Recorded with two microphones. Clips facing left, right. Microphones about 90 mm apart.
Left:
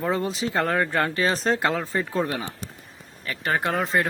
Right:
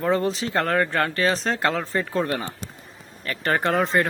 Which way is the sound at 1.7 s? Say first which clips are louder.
Right 1 dB; 5° left (ahead or behind).